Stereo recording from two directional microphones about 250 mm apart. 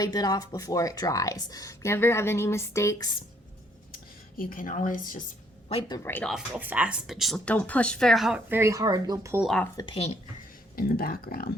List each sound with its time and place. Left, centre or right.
0.0 s speech: centre
3.9 s speech: left
6.0 s speech: centre
9.7 s speech: centre
10.8 s speech: left